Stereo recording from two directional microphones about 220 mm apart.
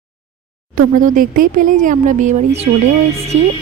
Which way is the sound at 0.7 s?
40° right (ahead or behind).